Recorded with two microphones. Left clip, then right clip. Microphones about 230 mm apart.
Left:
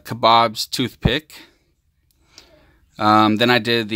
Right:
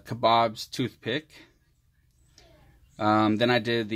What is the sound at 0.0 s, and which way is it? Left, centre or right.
Speech, left.